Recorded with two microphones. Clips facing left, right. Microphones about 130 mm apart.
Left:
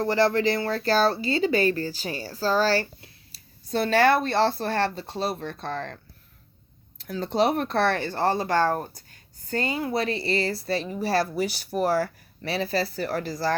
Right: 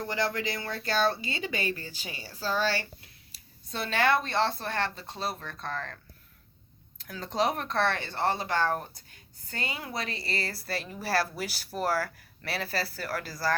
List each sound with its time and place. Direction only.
0.0 s speech: 35° left (ahead or behind)
7.0 s speech: 30° left (ahead or behind)